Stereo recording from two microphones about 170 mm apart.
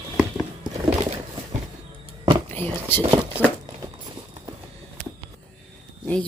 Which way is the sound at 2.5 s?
10° left (ahead or behind).